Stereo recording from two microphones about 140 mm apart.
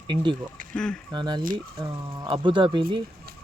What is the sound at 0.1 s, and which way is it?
Speech, 35° right (ahead or behind).